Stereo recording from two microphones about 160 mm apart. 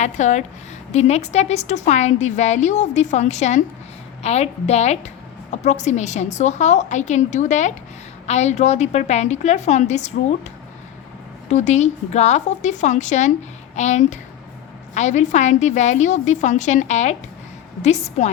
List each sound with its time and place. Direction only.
0.0 s a woman's voice: 45° left (ahead or behind)
11.4 s a woman's voice: 45° left (ahead or behind)